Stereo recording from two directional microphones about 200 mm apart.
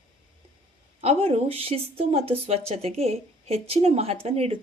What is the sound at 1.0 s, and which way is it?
A woman's voice, 30° right (ahead or behind).